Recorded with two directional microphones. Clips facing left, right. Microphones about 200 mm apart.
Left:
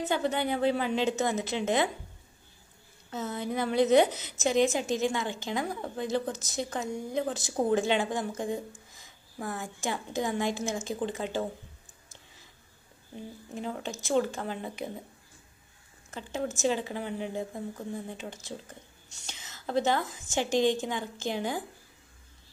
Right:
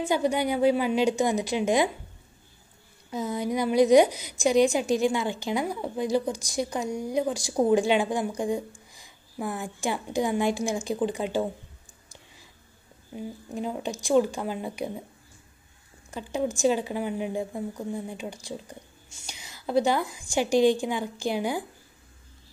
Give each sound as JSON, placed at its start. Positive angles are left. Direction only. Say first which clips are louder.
{"t": 0.0, "sound": "a woman's voice", "louder": "right 4 dB", "side_deg": -10}
{"t": 3.1, "sound": "a woman's voice", "louder": "right 5 dB", "side_deg": -10}
{"t": 13.6, "sound": "a woman's voice", "louder": "right 4 dB", "side_deg": -15}
{"t": 16.1, "sound": "a woman's voice", "louder": "right 5 dB", "side_deg": -15}